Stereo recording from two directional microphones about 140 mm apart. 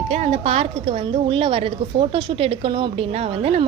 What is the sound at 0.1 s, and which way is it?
A woman's voice, 50° right (ahead or behind).